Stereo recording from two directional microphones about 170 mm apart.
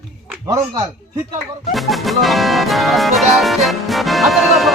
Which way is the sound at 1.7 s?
Centre (ahead or behind).